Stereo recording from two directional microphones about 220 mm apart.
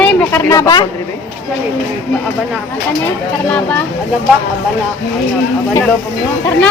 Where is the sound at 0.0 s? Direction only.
5° left (ahead or behind).